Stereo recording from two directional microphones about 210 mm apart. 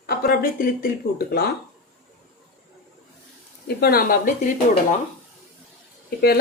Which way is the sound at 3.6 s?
50° left (ahead or behind).